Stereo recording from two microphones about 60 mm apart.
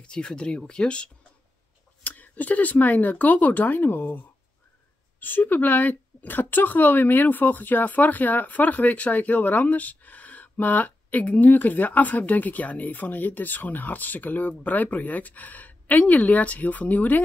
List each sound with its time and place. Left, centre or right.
0.0 s speech: centre